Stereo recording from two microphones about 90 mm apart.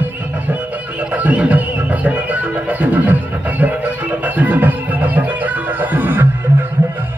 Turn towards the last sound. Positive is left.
turn(degrees=-25)  # may be behind; listen again after turning